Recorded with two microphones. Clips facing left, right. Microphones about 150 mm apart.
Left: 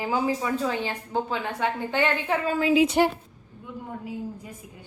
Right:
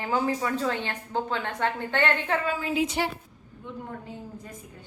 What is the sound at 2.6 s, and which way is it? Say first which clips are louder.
Speech: left 7 dB; 90° left.